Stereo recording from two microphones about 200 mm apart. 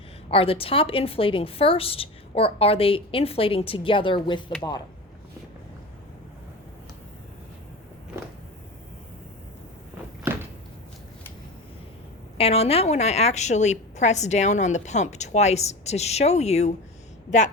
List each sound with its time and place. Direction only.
0.3 s a woman's voice: 30° left (ahead or behind)
12.4 s a woman's voice: 30° left (ahead or behind)